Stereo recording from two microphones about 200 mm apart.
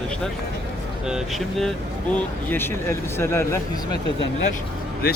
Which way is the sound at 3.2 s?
10° left (ahead or behind).